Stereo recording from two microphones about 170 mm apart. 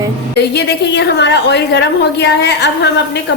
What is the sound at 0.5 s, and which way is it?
A woman's voice, 85° left.